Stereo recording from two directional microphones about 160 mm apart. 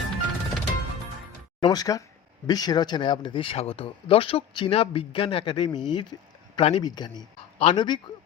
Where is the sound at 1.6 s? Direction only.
25° left (ahead or behind).